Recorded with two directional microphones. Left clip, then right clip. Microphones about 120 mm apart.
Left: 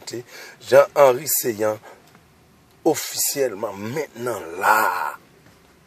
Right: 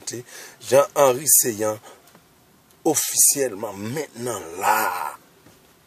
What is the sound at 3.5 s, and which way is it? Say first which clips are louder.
Speech: left 3 dB; 10° right (ahead or behind).